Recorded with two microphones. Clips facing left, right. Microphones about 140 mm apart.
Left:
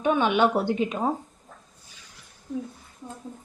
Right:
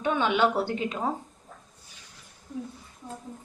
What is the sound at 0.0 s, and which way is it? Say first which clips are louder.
A woman's voice: left 3 dB; 15° left (ahead or behind).